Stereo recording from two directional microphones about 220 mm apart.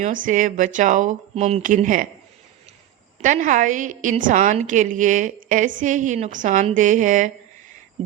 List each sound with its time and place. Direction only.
0.0 s a woman's voice: 35° right (ahead or behind)
3.2 s a woman's voice: 35° right (ahead or behind)